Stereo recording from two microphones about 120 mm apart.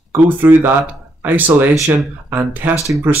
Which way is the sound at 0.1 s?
15° right (ahead or behind).